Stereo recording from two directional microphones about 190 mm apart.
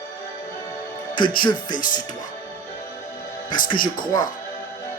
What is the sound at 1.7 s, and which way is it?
Speech, 45° left (ahead or behind).